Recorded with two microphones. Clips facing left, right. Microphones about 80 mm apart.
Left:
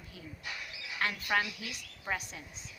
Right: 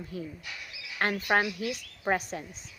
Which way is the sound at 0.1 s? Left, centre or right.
Right.